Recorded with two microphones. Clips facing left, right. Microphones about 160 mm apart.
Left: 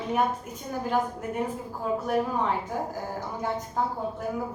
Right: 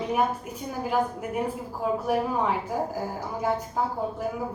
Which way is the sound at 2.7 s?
10° right (ahead or behind).